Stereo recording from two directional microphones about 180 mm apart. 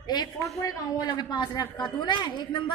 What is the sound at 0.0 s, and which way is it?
A woman's voice, 25° left (ahead or behind).